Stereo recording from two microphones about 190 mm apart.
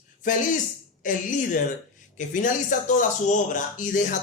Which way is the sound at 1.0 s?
45° left (ahead or behind).